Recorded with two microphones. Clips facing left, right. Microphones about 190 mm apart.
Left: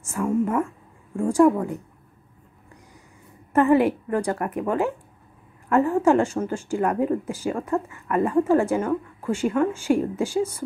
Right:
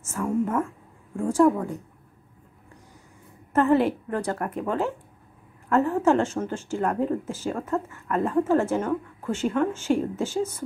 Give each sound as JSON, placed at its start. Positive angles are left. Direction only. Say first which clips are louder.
{"t": 0.0, "sound": "speech", "louder": "left 2 dB", "side_deg": 10}
{"t": 3.5, "sound": "speech", "louder": "left 2 dB", "side_deg": 10}